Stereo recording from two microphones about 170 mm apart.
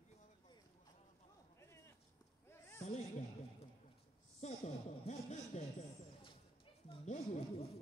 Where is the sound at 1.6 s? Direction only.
15° left (ahead or behind).